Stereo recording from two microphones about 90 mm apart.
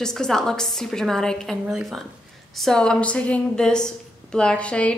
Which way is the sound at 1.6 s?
5° right (ahead or behind).